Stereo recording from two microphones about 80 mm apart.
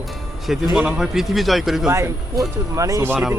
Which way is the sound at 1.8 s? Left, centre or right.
Right.